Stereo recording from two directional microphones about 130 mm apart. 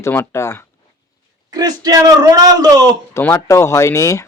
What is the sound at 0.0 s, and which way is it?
Speech, 20° left (ahead or behind).